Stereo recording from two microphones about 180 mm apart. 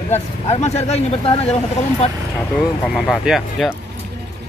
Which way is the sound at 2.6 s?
Centre (ahead or behind).